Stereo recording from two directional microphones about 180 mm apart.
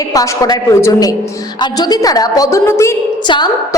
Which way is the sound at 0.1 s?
20° left (ahead or behind).